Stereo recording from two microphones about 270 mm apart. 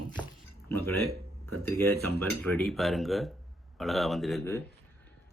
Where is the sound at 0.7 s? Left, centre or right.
Centre.